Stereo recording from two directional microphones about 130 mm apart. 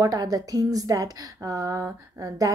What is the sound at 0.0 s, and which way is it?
Speech, 30° right (ahead or behind).